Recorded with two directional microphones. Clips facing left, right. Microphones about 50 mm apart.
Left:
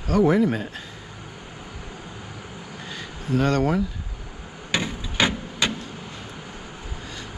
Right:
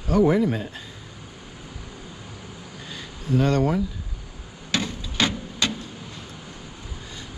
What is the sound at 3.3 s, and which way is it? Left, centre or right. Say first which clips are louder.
Speech: even; left.